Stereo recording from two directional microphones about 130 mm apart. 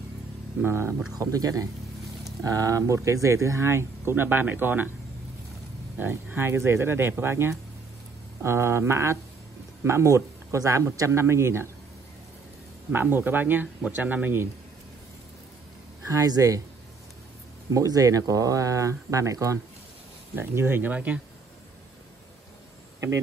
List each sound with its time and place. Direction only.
0.6 s speech: 20° right (ahead or behind)
5.9 s speech: 15° right (ahead or behind)
12.9 s speech: 15° right (ahead or behind)
16.1 s speech: 30° right (ahead or behind)
17.6 s speech: 25° right (ahead or behind); by 21.2 s 10° right (ahead or behind)
22.9 s a sound: 25° right (ahead or behind)